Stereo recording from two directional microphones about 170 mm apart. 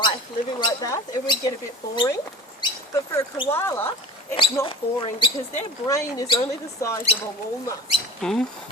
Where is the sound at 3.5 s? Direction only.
15° left (ahead or behind).